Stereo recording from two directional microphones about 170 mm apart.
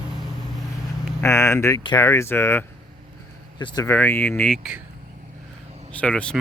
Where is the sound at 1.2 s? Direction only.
15° left (ahead or behind).